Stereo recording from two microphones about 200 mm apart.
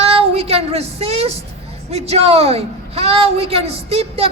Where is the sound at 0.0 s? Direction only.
30° right (ahead or behind).